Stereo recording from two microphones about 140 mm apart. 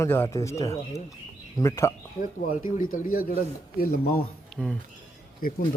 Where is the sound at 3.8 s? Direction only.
90° left.